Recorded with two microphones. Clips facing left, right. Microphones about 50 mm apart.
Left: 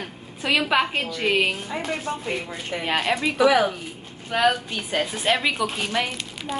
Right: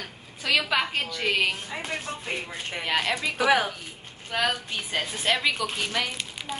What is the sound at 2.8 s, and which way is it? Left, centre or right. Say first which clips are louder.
A woman's voice: left 3 dB; centre.